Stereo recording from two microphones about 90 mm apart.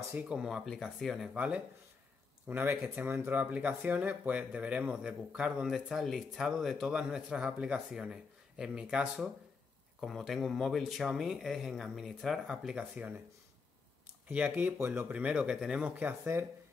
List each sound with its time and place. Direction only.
0.1 s speech: 10° right (ahead or behind)
1.3 s speech: 15° right (ahead or behind)
9.9 s speech: centre (ahead or behind)
12.7 s speech: 15° right (ahead or behind)
14.3 s speech: 15° right (ahead or behind)